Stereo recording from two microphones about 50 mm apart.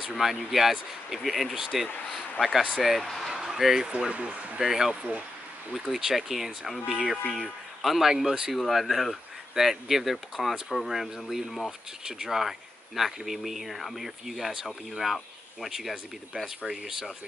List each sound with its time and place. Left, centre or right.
0.1 s speech: centre
3.3 s a sound: centre
4.1 s speech: right
4.6 s speech: centre
8.1 s speech: centre
8.5 s speech: centre